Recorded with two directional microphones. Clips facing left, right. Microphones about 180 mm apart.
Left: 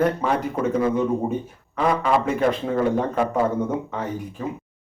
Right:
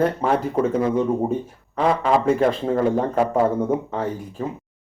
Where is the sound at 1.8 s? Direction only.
30° right (ahead or behind).